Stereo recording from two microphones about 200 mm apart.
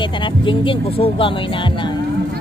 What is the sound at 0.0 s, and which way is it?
Speech, 25° left (ahead or behind).